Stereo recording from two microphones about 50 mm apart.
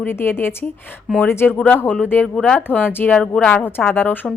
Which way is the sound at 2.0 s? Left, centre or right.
Left.